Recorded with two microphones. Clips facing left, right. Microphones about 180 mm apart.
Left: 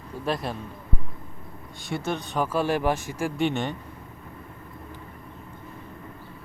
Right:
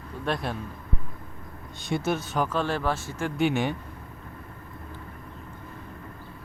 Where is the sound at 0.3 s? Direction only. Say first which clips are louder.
Left 1 dB; centre (ahead or behind).